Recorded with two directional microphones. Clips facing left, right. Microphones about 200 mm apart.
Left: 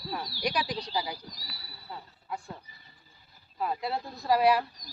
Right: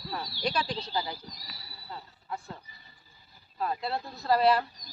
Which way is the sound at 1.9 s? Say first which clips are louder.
Even; 15° left (ahead or behind).